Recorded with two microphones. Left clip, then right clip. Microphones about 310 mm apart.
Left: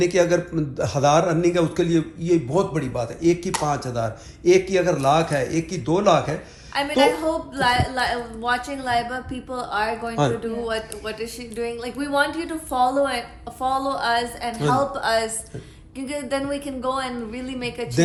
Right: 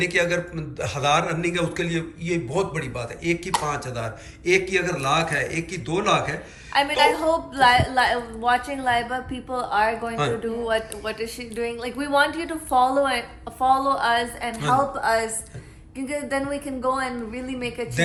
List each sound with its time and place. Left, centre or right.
0.0 s a man's voice: centre
17.3 s a man's voice: centre